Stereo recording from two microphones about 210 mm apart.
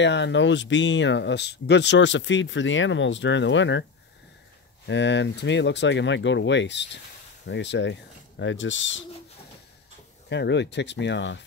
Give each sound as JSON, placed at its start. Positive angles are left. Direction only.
{"t": 0.0, "sound": "speech", "side_deg": 55}
{"t": 4.8, "sound": "speech", "side_deg": 60}
{"t": 10.3, "sound": "speech", "side_deg": 55}